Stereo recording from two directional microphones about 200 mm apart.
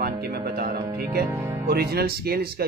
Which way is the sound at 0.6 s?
50° right (ahead or behind).